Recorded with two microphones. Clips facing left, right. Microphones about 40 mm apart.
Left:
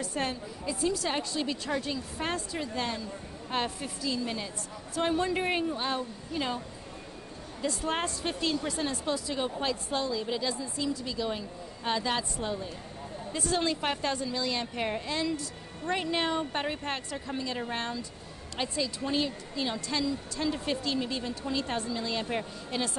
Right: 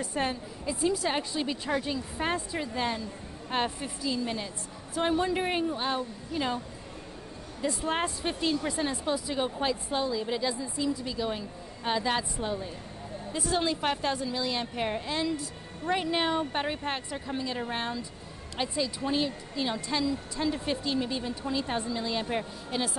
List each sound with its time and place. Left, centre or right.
0.0 s a woman's voice: centre
7.6 s a woman's voice: centre